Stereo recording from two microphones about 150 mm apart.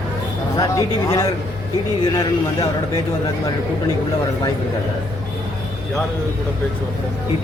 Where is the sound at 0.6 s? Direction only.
25° left (ahead or behind).